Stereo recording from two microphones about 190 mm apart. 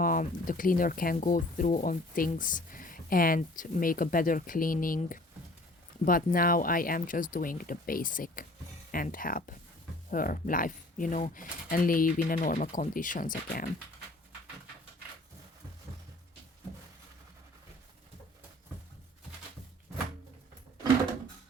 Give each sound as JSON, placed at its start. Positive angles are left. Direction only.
{"t": 0.0, "sound": "speech", "side_deg": 45}